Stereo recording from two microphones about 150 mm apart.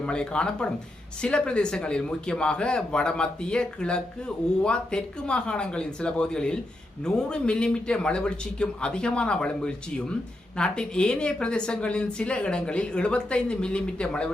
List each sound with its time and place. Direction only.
0.0 s a man's voice: 5° left (ahead or behind)